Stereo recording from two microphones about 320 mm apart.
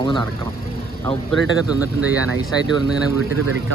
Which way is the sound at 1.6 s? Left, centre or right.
Centre.